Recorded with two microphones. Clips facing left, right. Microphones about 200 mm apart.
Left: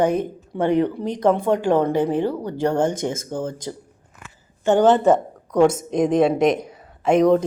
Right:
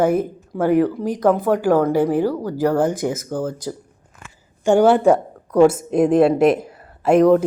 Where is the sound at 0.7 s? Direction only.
25° left (ahead or behind).